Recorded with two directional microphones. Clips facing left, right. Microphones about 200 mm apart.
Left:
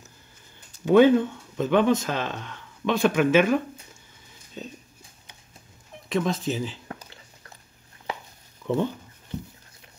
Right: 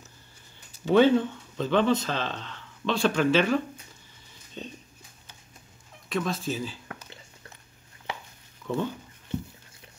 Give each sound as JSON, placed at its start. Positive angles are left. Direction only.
{"t": 0.8, "sound": "speech", "side_deg": 15}
{"t": 6.0, "sound": "speech", "side_deg": 20}
{"t": 8.6, "sound": "speech", "side_deg": 15}